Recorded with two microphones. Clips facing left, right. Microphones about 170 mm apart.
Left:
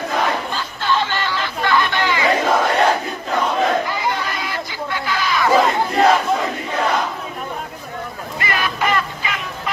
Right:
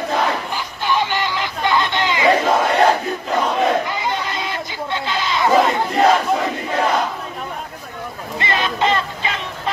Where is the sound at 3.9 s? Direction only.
20° right (ahead or behind).